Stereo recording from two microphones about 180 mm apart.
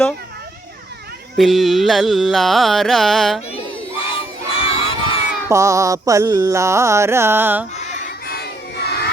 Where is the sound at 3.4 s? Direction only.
35° left (ahead or behind).